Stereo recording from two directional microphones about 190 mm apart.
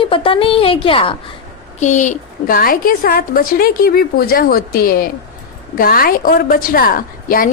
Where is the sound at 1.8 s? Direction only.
40° left (ahead or behind).